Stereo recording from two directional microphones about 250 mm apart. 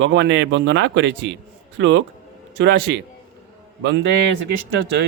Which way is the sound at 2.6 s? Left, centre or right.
Right.